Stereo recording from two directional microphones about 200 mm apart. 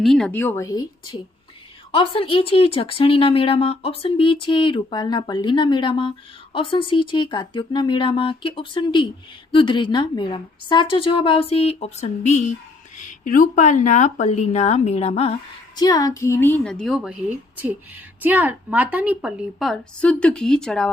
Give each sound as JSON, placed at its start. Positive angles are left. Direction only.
{"t": 0.0, "sound": "speech", "side_deg": 0}
{"t": 15.8, "sound": "a woman's voice", "side_deg": 20}